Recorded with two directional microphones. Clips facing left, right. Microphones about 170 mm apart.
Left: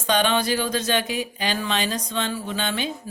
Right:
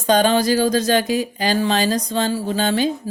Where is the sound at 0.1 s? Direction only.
40° right (ahead or behind).